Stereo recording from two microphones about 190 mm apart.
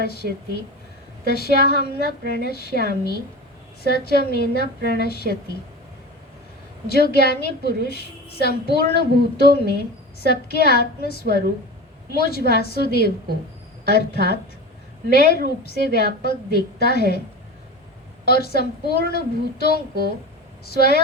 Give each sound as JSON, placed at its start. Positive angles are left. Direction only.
{"t": 0.0, "sound": "a woman's voice", "side_deg": 55}
{"t": 6.8, "sound": "a woman's voice", "side_deg": 55}
{"t": 18.3, "sound": "a woman's voice", "side_deg": 55}